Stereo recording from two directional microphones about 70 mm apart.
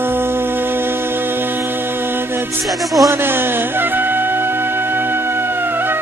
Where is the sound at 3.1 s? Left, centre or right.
Right.